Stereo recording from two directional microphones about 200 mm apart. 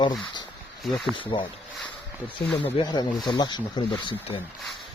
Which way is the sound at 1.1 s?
25° left (ahead or behind).